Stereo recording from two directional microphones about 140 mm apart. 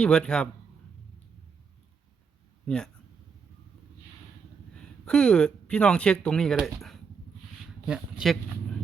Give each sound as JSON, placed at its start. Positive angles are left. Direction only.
{"t": 0.0, "sound": "speech", "side_deg": 5}
{"t": 2.6, "sound": "speech", "side_deg": 5}
{"t": 4.7, "sound": "speech", "side_deg": 5}